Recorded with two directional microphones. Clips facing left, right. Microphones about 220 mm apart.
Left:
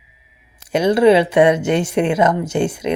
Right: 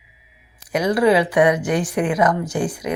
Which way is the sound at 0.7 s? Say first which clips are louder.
Left 4 dB; 25° left (ahead or behind).